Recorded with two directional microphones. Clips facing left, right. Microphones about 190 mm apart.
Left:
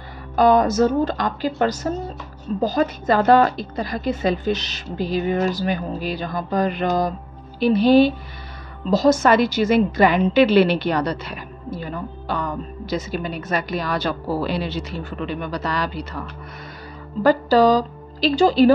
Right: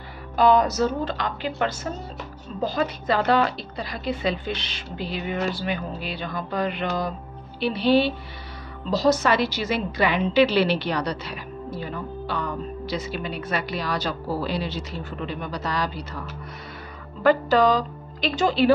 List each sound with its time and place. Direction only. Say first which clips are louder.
0.4 s a woman's voice: left 3 dB; 45° left (ahead or behind); by 16.2 s 65° left (ahead or behind)
17.2 s a woman's voice: left 3 dB; 35° left (ahead or behind)